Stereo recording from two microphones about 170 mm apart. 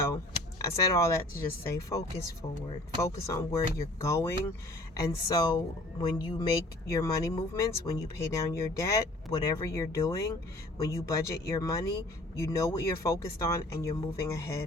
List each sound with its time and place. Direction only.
0.6 s speech: 20° left (ahead or behind)